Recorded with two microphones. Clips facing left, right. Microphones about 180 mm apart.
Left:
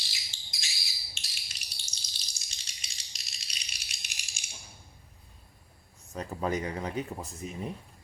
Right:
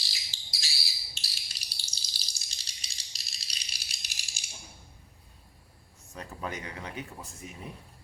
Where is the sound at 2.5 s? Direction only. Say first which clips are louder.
Left 2 dB; 35° right (ahead or behind).